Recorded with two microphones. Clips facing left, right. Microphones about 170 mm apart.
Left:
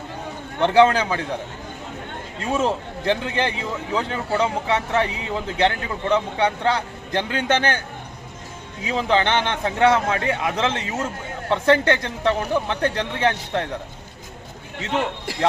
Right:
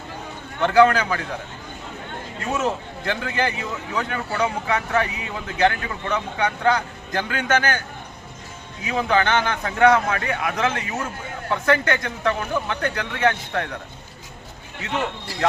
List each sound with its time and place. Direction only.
0.6 s a man's voice: 25° left (ahead or behind)
2.4 s a man's voice: 30° left (ahead or behind)
8.9 s a man's voice: 25° left (ahead or behind)